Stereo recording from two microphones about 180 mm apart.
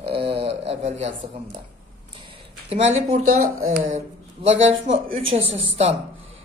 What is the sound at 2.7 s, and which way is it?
Speech, 35° right (ahead or behind).